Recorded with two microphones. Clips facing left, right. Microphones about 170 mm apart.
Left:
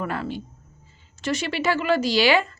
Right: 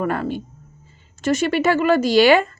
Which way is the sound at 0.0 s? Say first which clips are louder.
Right 6 dB; 50° right (ahead or behind).